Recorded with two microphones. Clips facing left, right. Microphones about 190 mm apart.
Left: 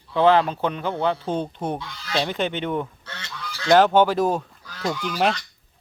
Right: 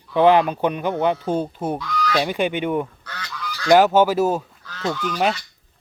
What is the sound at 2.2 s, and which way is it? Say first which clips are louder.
Speech: even; 10° right (ahead or behind).